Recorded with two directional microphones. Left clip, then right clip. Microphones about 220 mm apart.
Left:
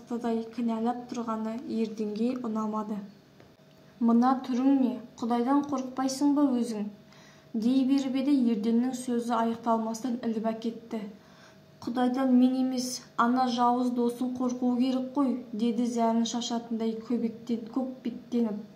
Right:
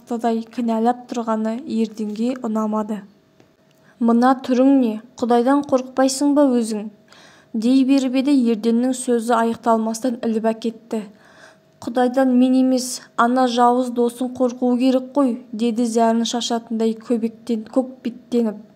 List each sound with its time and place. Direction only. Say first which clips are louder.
0.1 s a woman's voice: right 10 dB; 50° right (ahead or behind)
4.0 s a woman's voice: right 9 dB; 45° right (ahead or behind)